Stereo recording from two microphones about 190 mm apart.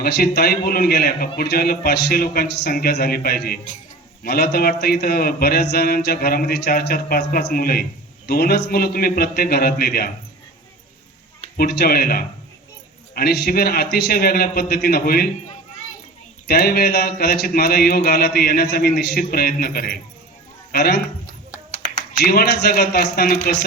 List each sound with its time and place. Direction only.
0.0 s a man's voice: 55° left (ahead or behind)
11.5 s a man's voice: 55° left (ahead or behind)
16.5 s a man's voice: 55° left (ahead or behind)
22.1 s a man's voice: 55° left (ahead or behind)